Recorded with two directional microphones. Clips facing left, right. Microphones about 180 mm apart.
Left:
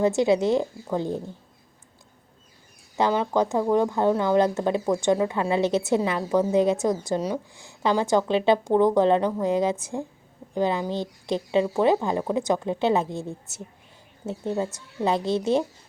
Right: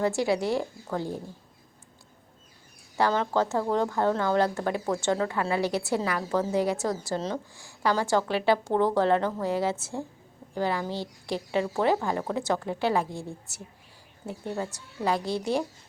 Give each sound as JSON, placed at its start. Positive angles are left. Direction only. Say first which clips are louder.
{"t": 0.0, "sound": "speech", "louder": "left 5 dB", "side_deg": 20}
{"t": 3.0, "sound": "speech", "louder": "left 3 dB", "side_deg": 15}